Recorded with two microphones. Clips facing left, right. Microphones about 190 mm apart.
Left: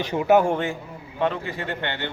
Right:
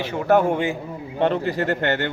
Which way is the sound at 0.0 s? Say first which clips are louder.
Left 1 dB; 15° left (ahead or behind).